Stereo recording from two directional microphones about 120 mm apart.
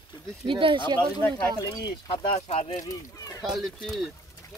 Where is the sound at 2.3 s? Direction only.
70° left (ahead or behind).